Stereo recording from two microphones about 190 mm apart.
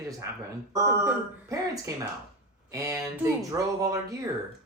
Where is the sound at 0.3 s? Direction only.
15° right (ahead or behind).